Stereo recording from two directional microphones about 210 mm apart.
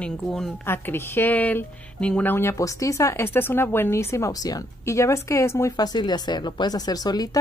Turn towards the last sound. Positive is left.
turn(degrees=20)  # may be behind; listen again after turning